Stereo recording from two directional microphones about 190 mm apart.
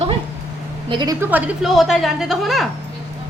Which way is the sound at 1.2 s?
10° right (ahead or behind).